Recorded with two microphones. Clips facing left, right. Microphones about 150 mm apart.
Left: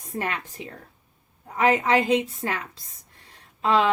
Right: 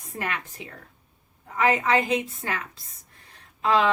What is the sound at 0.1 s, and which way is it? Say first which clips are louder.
Speech: left 3 dB; 30° left (ahead or behind).